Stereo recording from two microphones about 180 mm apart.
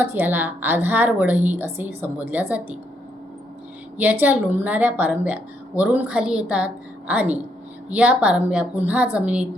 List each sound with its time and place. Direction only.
0.0 s a woman's voice: 10° right (ahead or behind)
3.9 s a woman's voice: 10° right (ahead or behind)